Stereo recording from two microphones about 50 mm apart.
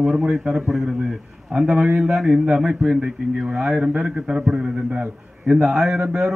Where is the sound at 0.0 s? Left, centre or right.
Centre.